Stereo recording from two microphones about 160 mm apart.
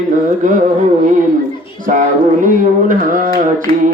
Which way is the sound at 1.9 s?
55° right (ahead or behind).